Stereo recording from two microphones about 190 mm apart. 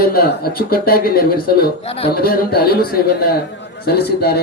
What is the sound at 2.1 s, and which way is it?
A man's voice, 55° left (ahead or behind).